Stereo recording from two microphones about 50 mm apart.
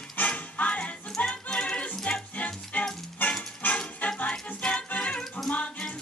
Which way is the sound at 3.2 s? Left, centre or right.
Left.